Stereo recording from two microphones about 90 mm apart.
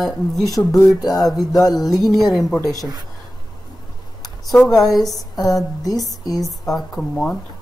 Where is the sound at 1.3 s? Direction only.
Centre (ahead or behind).